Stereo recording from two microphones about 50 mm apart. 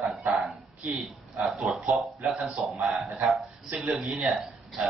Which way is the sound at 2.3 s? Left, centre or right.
Centre.